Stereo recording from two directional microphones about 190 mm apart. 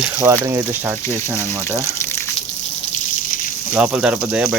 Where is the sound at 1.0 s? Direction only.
15° left (ahead or behind).